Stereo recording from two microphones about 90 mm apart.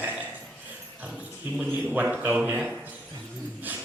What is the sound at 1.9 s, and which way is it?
Speech, 20° right (ahead or behind).